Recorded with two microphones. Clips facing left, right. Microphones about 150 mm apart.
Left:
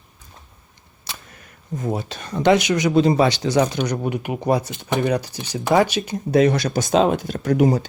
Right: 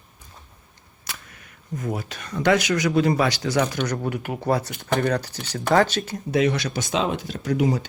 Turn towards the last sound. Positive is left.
turn(degrees=45)  # may be behind; listen again after turning